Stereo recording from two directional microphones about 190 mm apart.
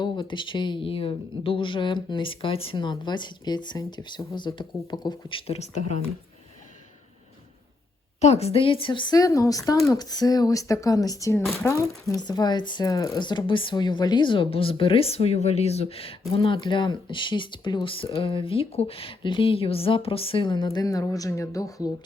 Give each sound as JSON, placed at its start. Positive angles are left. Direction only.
{"t": 0.0, "sound": "speech", "side_deg": 25}
{"t": 8.2, "sound": "speech", "side_deg": 35}